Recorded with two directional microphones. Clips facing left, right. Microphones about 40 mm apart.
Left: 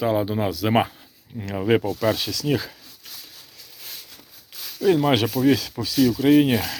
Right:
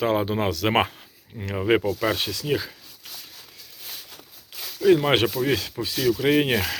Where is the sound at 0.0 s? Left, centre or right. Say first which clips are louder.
Even; right.